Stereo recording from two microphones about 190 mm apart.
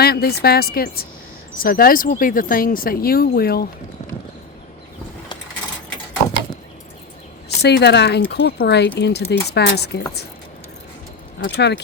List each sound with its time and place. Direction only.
0.0 s speech: 55° left (ahead or behind)
7.6 s speech: 60° left (ahead or behind)
11.4 s speech: 65° left (ahead or behind)